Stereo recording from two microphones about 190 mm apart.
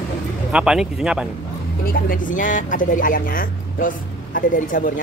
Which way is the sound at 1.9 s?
45° left (ahead or behind).